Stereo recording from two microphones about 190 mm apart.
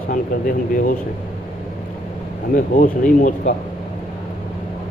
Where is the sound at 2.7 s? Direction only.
45° left (ahead or behind).